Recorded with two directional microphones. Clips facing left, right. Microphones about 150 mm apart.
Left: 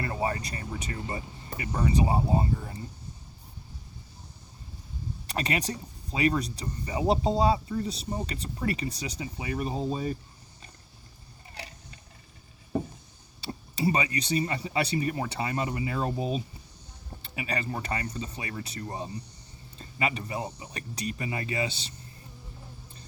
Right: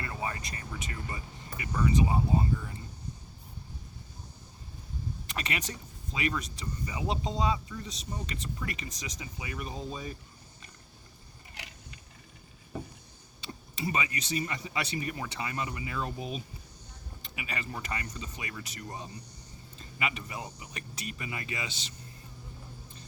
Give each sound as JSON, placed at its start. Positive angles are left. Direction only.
{"t": 0.0, "sound": "speech", "side_deg": 35}
{"t": 5.3, "sound": "speech", "side_deg": 35}
{"t": 11.5, "sound": "a sound", "side_deg": 35}
{"t": 13.4, "sound": "speech", "side_deg": 35}